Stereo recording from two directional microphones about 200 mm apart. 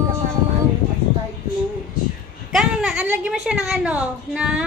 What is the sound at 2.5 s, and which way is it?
Speech, centre (ahead or behind).